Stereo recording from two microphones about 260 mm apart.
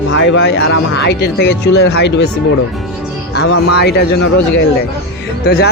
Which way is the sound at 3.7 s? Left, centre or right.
Left.